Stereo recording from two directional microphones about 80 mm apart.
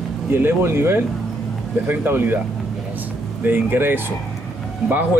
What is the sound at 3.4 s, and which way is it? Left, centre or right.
Speech, right.